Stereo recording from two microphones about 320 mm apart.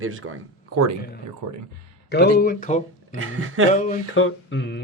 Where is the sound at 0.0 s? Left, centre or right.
Right.